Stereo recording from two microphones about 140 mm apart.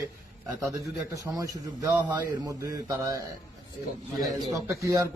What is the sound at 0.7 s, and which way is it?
A man's voice, 25° right (ahead or behind).